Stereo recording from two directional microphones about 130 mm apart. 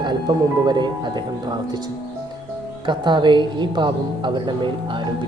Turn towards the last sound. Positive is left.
turn(degrees=-35)  # may be behind; listen again after turning